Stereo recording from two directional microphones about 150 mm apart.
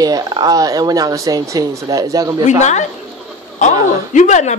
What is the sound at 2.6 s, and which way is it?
A woman's voice, 50° left (ahead or behind).